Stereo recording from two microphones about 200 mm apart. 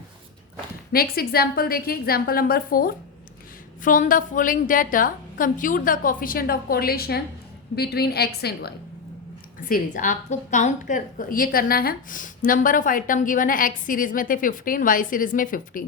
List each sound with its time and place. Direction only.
0.9 s a woman's voice: 50° left (ahead or behind)